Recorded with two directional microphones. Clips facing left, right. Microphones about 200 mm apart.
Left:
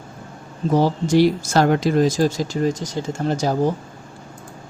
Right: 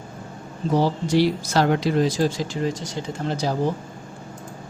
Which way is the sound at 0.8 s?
45° left (ahead or behind).